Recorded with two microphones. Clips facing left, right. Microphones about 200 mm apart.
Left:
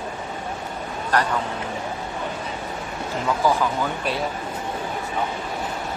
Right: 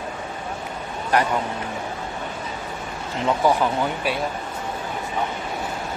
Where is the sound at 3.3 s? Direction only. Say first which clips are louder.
Right 2 dB; 20° right (ahead or behind).